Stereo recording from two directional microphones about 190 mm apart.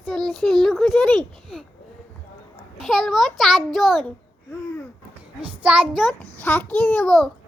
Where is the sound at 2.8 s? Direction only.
Centre (ahead or behind).